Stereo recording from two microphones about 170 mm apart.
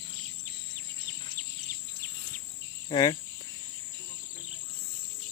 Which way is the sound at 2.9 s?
30° left (ahead or behind).